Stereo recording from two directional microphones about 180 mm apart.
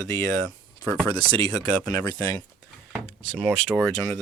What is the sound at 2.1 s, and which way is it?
Speech, 20° left (ahead or behind).